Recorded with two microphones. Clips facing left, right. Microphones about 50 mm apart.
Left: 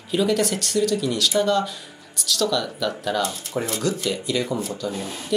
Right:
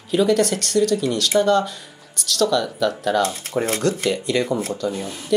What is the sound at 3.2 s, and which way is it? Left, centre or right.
Speech, right.